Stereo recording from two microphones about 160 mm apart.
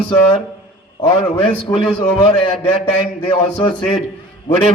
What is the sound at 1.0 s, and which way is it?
A man's voice, 30° left (ahead or behind).